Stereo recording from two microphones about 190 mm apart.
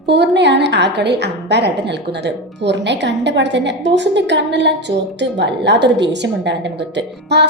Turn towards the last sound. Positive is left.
turn(degrees=-60)  # may be behind; listen again after turning